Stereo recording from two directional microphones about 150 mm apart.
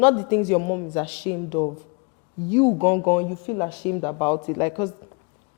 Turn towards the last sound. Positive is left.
turn(degrees=20)  # may be behind; listen again after turning